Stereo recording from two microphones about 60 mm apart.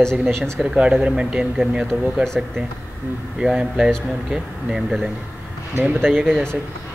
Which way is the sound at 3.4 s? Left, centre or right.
Centre.